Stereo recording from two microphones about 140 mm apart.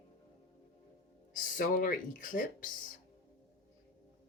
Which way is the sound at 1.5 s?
85° left.